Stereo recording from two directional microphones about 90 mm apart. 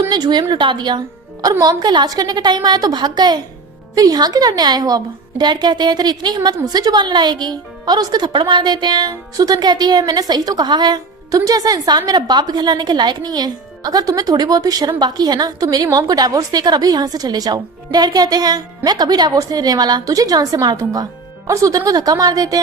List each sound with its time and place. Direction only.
0.1 s a woman's voice: 50° right (ahead or behind)